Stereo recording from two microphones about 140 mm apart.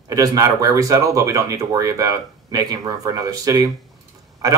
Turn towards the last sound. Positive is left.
turn(degrees=-25)  # may be behind; listen again after turning